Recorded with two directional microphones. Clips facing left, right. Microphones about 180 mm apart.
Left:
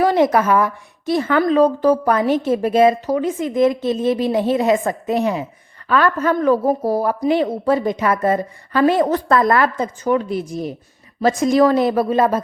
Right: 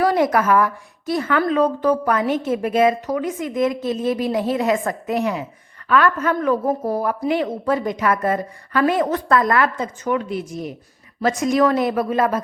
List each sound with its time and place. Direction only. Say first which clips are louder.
0.0 s a woman's voice: left 2 dB; 25° left (ahead or behind)